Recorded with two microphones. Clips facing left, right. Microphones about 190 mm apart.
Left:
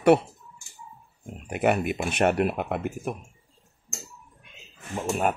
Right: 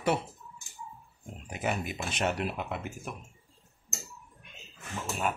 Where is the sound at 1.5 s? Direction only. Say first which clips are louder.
Left 9 dB; 65° left (ahead or behind).